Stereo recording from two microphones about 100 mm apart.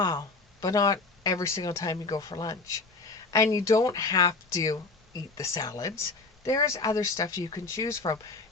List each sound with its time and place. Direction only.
0.0 s speech: 35° left (ahead or behind)